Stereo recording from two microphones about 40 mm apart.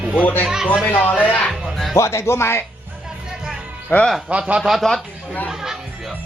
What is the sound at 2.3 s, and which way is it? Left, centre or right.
Speech, left.